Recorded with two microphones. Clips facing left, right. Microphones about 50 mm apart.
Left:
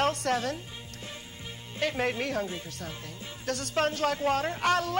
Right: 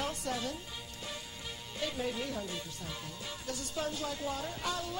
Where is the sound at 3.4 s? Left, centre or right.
Left.